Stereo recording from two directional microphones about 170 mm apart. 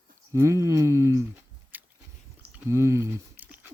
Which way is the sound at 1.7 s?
10° right (ahead or behind).